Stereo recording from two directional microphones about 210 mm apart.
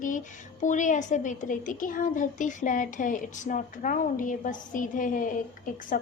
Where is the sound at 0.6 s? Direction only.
35° left (ahead or behind).